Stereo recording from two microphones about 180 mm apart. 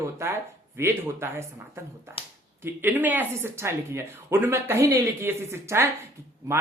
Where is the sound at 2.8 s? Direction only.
10° right (ahead or behind).